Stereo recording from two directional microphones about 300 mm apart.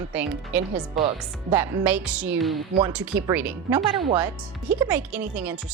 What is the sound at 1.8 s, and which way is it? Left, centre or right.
A woman's voice, centre.